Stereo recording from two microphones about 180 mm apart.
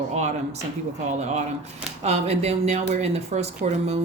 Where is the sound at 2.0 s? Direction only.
35° right (ahead or behind).